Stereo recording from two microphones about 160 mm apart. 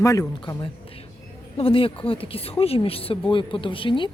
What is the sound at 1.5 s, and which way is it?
Speech, 35° left (ahead or behind).